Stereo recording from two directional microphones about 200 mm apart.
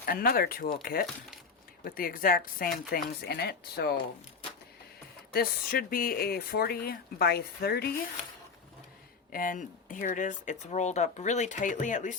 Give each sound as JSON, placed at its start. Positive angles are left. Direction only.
{"t": 0.0, "sound": "speech", "side_deg": 50}
{"t": 5.3, "sound": "speech", "side_deg": 50}
{"t": 9.3, "sound": "speech", "side_deg": 40}